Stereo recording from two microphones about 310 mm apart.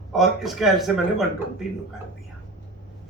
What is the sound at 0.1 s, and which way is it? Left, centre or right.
Speech, centre.